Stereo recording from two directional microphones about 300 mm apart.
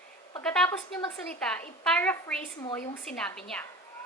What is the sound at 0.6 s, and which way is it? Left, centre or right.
Speech, centre.